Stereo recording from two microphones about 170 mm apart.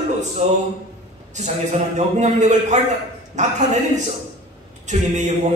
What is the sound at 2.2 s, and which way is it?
A man's voice, 45° right (ahead or behind).